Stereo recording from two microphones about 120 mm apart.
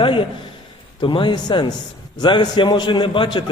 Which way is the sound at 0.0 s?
45° left (ahead or behind).